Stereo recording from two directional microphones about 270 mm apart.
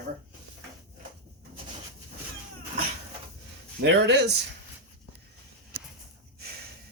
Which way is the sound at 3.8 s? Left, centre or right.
Right.